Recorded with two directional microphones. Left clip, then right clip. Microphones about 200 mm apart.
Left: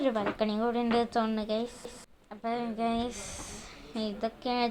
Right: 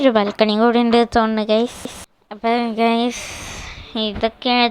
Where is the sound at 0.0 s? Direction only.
45° right (ahead or behind).